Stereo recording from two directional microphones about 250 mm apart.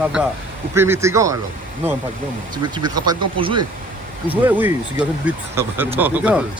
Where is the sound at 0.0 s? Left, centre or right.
Centre.